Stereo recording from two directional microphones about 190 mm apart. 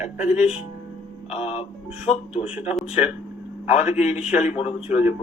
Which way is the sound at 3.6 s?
35° left (ahead or behind).